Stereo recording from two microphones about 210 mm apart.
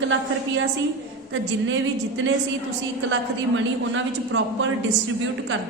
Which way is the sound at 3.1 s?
65° right (ahead or behind).